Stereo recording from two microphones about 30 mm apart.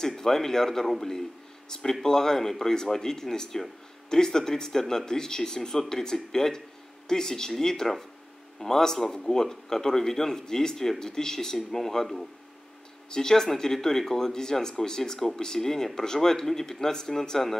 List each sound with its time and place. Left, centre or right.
0.0 s speech: centre
1.7 s speech: centre